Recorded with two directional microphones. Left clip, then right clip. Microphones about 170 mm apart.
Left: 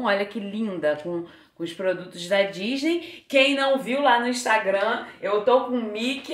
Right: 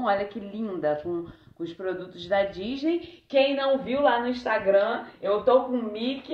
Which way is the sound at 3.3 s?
25° left (ahead or behind).